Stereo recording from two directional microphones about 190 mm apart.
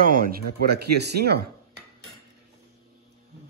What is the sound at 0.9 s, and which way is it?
Speech, 60° right (ahead or behind).